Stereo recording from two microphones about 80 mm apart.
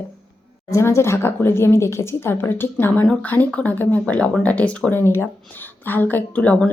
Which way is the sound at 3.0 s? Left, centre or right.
Centre.